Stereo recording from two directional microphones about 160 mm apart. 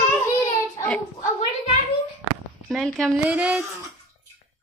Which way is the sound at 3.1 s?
10° right (ahead or behind).